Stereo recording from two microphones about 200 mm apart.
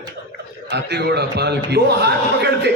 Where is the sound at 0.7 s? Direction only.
55° right (ahead or behind).